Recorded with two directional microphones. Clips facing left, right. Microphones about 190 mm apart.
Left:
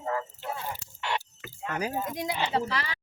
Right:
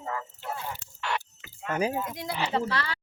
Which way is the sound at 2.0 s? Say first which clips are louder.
Left 2 dB; 20° left (ahead or behind).